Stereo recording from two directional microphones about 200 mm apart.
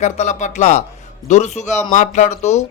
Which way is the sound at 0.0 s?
35° left (ahead or behind).